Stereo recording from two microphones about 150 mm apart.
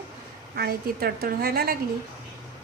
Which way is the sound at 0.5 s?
90° right.